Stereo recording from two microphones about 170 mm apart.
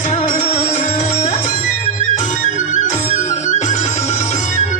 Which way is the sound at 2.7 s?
45° left (ahead or behind).